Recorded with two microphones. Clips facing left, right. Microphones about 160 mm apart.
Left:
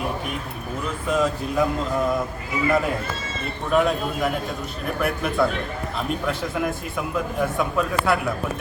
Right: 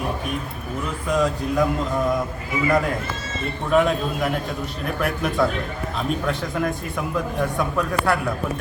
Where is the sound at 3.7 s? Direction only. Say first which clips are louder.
Right 1 dB; centre (ahead or behind).